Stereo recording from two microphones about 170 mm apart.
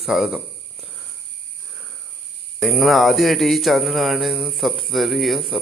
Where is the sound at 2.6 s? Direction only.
Centre (ahead or behind).